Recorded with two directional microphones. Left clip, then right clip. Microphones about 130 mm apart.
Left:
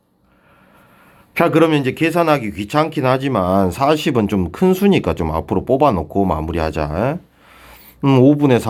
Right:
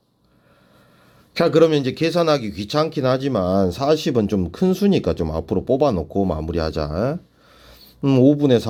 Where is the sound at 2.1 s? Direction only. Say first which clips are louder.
Left 2 dB; 35° right (ahead or behind).